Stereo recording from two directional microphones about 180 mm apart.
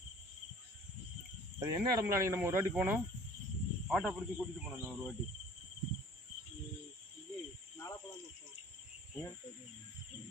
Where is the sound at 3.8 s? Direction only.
Centre (ahead or behind).